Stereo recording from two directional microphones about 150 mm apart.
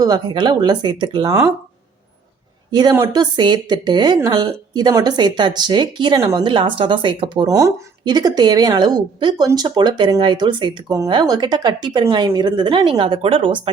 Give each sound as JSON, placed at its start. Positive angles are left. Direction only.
{"t": 0.0, "sound": "a woman's voice", "side_deg": -25}
{"t": 2.7, "sound": "a woman's voice", "side_deg": -25}